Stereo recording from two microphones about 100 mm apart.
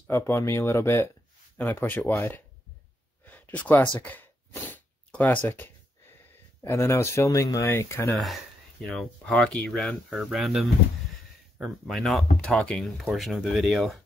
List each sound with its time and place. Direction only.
0.2 s speech: 30° left (ahead or behind)
3.3 s a sound: 15° left (ahead or behind)
6.6 s speech: 30° left (ahead or behind)
8.8 s speech: 5° left (ahead or behind)